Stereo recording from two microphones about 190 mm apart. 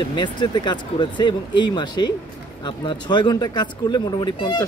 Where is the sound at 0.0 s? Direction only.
25° left (ahead or behind).